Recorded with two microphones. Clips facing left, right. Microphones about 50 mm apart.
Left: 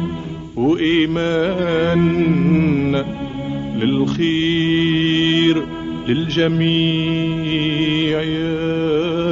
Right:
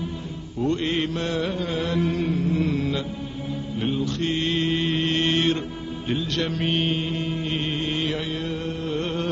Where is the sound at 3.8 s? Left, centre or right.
Left.